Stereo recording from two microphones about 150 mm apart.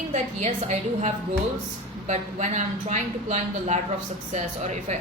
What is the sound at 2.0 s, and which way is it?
A woman's voice, 50° right (ahead or behind).